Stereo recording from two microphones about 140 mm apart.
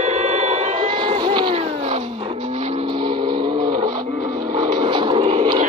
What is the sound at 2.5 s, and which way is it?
Vehicle, 50° right (ahead or behind).